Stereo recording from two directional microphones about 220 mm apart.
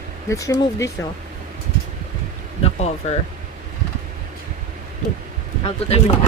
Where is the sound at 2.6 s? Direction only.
30° left (ahead or behind).